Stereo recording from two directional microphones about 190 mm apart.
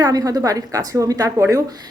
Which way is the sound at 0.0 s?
20° right (ahead or behind).